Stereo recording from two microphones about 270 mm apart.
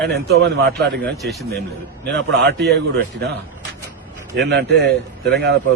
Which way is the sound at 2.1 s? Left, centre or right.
Right.